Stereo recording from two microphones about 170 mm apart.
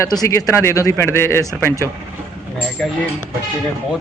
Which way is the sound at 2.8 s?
Centre (ahead or behind).